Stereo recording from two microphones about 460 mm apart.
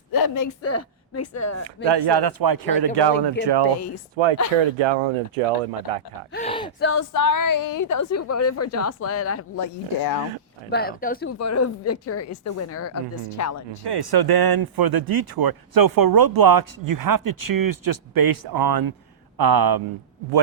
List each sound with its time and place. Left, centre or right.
0.1 s speech: left
1.9 s speech: right
4.2 s speech: right
6.3 s speech: centre
6.7 s speech: left
7.1 s a woman's voice: left
10.0 s speech: left
10.7 s speech: centre
11.3 s a woman's voice: left
13.8 s speech: right